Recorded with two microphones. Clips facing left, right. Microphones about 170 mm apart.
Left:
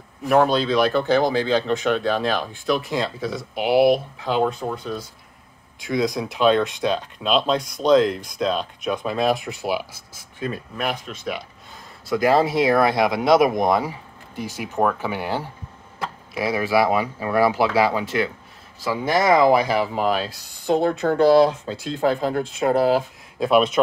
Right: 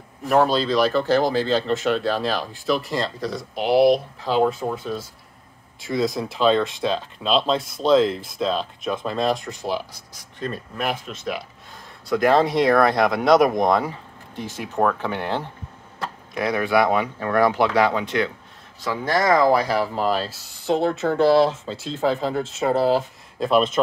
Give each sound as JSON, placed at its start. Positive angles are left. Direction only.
{"t": 0.2, "sound": "speech", "side_deg": 0}
{"t": 19.0, "sound": "speech", "side_deg": 15}
{"t": 19.7, "sound": "speech", "side_deg": 0}